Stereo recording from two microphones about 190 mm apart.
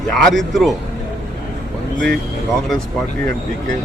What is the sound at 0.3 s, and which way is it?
Speech, centre (ahead or behind).